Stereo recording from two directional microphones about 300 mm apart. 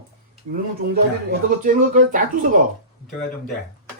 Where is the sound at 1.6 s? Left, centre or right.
Right.